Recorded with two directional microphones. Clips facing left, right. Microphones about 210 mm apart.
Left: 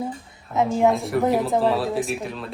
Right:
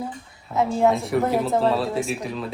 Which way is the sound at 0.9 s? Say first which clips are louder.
Even; centre (ahead or behind).